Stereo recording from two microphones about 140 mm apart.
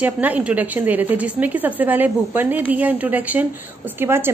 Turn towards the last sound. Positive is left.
turn(degrees=-15)  # may be behind; listen again after turning